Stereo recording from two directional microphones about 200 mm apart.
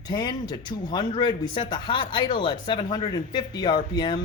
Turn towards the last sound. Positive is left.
turn(degrees=25)  # may be behind; listen again after turning